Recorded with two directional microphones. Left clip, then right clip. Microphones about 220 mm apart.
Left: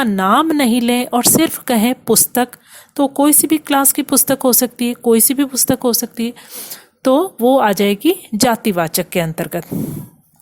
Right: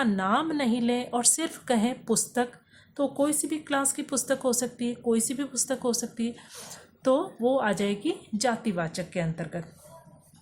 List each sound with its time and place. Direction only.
0.0 s a woman's voice: 40° left (ahead or behind)